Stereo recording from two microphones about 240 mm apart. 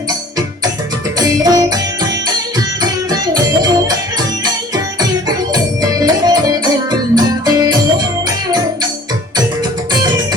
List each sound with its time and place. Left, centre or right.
1.2 s music: centre